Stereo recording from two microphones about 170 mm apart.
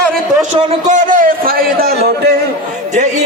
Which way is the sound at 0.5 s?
40° right (ahead or behind).